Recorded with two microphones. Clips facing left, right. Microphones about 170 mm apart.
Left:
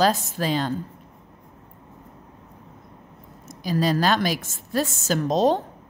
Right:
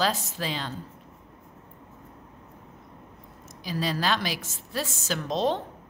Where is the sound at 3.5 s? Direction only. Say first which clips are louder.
Left 7 dB; 45° left (ahead or behind).